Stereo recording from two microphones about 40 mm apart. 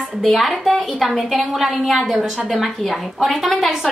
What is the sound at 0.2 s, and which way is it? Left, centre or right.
A woman's voice, centre.